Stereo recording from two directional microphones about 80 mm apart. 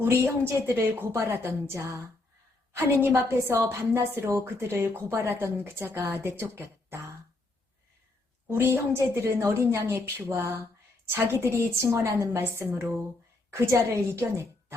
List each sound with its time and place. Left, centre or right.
0.0 s a woman's voice: right
8.4 s a woman's voice: right